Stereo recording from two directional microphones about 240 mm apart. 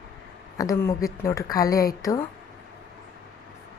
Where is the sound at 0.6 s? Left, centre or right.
Centre.